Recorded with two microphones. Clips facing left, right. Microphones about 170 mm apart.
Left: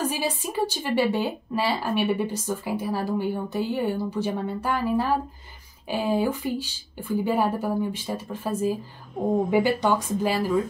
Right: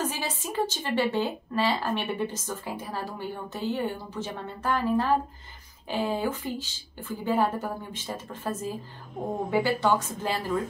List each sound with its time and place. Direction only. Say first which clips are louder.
0.0 s a woman's voice: left 4 dB; 10° left (ahead or behind)